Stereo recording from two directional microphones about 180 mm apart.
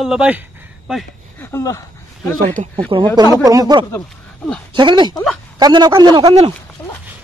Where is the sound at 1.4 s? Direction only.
15° left (ahead or behind).